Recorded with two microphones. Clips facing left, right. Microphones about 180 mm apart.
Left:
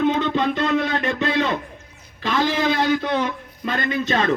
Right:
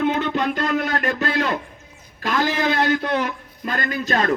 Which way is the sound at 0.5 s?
25° left (ahead or behind).